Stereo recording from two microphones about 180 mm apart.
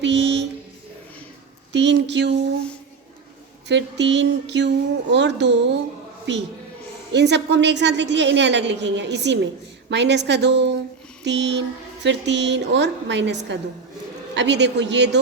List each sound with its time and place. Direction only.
0.0 s a sound: 80° right
1.7 s a woman's voice: 80° right
3.7 s a woman's voice: 80° right